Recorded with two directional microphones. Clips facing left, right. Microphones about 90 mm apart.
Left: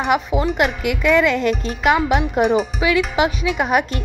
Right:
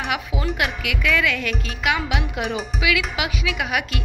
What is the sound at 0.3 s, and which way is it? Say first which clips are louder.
Speech: left 8 dB; 50° left (ahead or behind).